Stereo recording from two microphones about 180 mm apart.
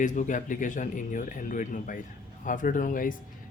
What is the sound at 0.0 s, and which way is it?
Speech, 45° left (ahead or behind).